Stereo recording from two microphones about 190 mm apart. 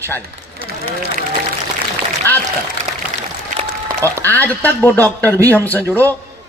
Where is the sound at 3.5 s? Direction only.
40° right (ahead or behind).